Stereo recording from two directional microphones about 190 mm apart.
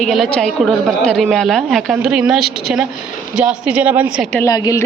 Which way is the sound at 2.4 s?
55° right (ahead or behind).